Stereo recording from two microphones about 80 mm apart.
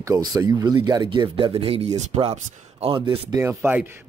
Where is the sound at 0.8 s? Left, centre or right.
Right.